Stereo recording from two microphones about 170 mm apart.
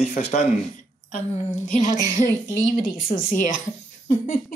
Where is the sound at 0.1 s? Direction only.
40° left (ahead or behind).